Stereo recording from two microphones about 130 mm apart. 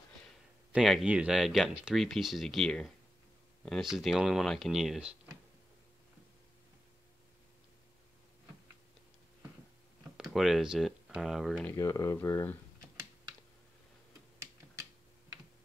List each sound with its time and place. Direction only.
0.7 s speech: centre (ahead or behind)
10.1 s speech: centre (ahead or behind)
11.7 s speech: 25° left (ahead or behind)